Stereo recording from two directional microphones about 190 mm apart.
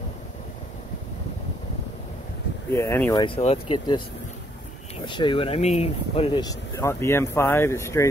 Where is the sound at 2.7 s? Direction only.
10° left (ahead or behind).